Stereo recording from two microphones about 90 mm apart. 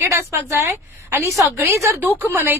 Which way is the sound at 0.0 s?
30° right (ahead or behind).